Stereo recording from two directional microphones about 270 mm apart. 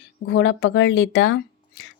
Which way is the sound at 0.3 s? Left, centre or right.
Left.